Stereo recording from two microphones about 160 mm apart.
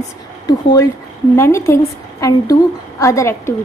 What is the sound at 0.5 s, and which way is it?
A woman's voice, 25° left (ahead or behind).